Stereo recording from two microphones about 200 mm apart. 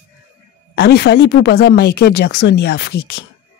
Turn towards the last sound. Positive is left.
turn(degrees=55)  # may be behind; listen again after turning